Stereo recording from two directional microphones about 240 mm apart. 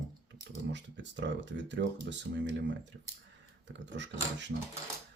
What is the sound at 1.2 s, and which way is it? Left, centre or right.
Speech, right.